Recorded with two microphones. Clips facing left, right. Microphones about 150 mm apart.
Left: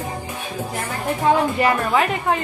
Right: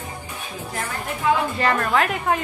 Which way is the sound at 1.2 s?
30° left (ahead or behind).